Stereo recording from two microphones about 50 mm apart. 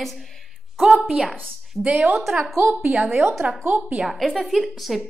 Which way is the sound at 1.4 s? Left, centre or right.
Right.